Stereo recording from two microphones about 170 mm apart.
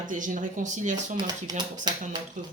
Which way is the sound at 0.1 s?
50° right (ahead or behind).